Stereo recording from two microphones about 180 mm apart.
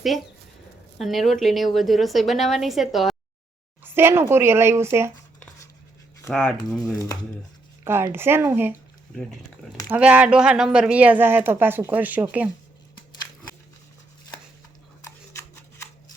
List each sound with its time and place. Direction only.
0.9 s a woman's voice: centre (ahead or behind)
3.9 s speech: 15° right (ahead or behind)
6.3 s a woman's voice: 5° left (ahead or behind)
6.9 s speech: 20° left (ahead or behind)
7.9 s speech: 15° right (ahead or behind)
9.9 s speech: 5° right (ahead or behind)
15.0 s a sound: 15° left (ahead or behind)